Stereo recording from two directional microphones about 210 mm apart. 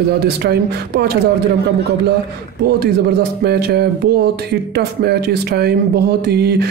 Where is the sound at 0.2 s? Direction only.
50° right (ahead or behind).